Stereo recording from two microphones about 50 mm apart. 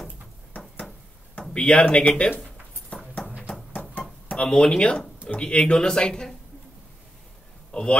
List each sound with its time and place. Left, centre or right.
1.4 s speech: left
2.9 s clip-clop: left
4.3 s speech: centre
7.7 s speech: centre